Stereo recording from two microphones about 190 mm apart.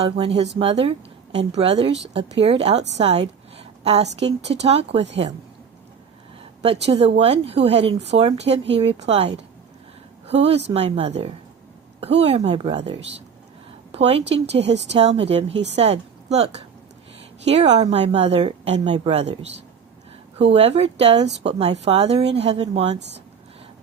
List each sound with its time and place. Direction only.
0.0 s a woman's voice: 30° right (ahead or behind)
3.0 s a sound: 35° right (ahead or behind)
4.4 s a woman's voice: 30° right (ahead or behind)
6.6 s a woman's voice: 30° right (ahead or behind)
14.6 s speech: 65° right (ahead or behind)
14.9 s a woman's voice: 35° right (ahead or behind)